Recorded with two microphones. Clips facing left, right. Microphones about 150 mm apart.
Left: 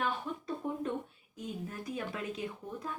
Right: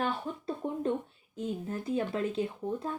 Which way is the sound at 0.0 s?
30° right (ahead or behind).